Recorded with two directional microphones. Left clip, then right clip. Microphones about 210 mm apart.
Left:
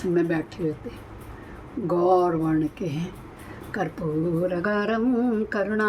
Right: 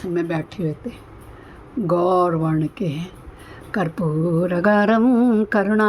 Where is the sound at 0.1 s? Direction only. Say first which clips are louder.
Right 1 dB; 40° right (ahead or behind).